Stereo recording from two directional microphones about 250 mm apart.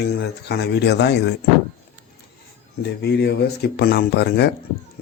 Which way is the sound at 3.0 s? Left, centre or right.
Left.